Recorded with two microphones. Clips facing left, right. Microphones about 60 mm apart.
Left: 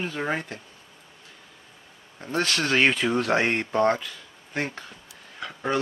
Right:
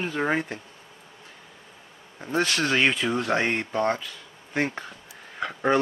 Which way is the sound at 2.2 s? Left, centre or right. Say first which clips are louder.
Right 1 dB; centre.